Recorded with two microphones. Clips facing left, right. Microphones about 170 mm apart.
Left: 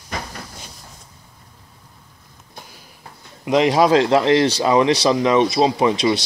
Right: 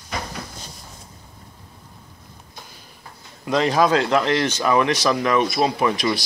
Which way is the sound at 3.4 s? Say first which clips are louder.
Left 3 dB; 20° left (ahead or behind).